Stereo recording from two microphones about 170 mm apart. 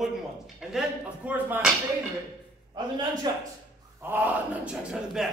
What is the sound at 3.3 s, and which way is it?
Speech, 25° right (ahead or behind).